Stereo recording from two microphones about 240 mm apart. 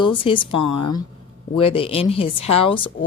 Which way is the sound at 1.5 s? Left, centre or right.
Left.